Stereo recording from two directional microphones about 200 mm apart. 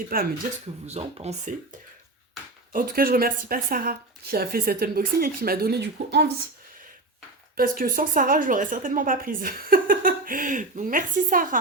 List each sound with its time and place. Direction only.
0.1 s a woman's voice: 45° right (ahead or behind)
0.9 s speech: 30° right (ahead or behind)
2.7 s a woman's voice: 45° right (ahead or behind)
7.5 s a woman's voice: 45° right (ahead or behind)